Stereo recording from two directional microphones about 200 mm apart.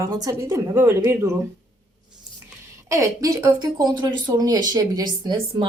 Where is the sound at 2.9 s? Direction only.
15° right (ahead or behind).